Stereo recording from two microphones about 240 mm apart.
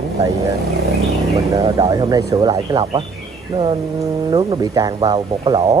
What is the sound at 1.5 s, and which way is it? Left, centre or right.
Speech, centre.